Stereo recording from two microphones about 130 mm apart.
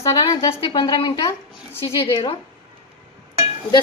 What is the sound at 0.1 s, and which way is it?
A woman's voice, 30° left (ahead or behind).